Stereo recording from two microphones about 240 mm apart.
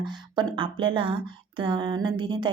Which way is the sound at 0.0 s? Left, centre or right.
Centre.